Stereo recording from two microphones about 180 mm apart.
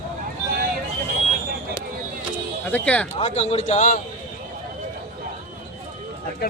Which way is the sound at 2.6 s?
10° left (ahead or behind).